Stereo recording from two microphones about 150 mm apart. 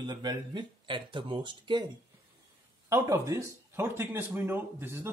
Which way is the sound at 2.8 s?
20° right (ahead or behind).